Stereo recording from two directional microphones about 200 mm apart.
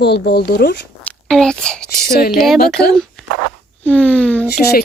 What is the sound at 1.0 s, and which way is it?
A child's voice, 5° left (ahead or behind).